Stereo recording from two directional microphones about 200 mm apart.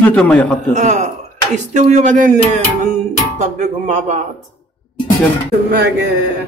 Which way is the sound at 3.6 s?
35° right (ahead or behind).